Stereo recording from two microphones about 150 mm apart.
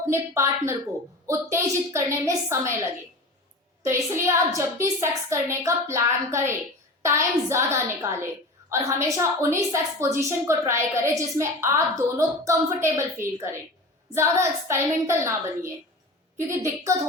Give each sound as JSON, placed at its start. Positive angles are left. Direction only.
{"t": 0.1, "sound": "a woman's voice", "side_deg": -20}
{"t": 3.8, "sound": "a woman's voice", "side_deg": -20}